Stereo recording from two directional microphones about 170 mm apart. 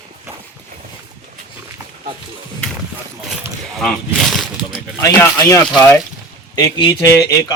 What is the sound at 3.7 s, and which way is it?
Speech, centre (ahead or behind).